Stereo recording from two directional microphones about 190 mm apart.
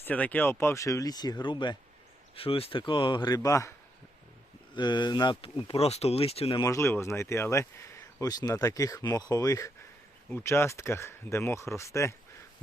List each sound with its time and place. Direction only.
0.0 s speech: 10° left (ahead or behind); by 6.6 s 30° left (ahead or behind)
6.6 s speech: 15° left (ahead or behind)